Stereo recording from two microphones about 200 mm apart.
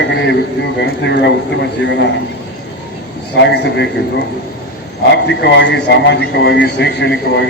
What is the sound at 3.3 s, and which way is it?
Speech, 60° left (ahead or behind).